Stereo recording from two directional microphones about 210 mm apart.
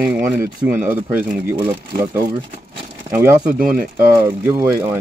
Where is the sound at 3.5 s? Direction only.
40° right (ahead or behind).